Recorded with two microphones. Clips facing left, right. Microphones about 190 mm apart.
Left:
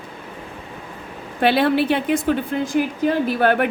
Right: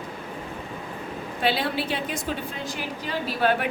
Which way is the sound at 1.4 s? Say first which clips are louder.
Left 9 dB; 60° left (ahead or behind).